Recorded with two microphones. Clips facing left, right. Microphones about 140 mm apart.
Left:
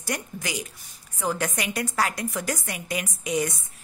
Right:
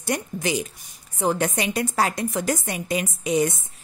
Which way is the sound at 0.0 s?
25° right (ahead or behind).